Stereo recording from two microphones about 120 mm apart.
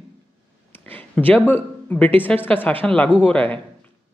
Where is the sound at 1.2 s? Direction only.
15° left (ahead or behind).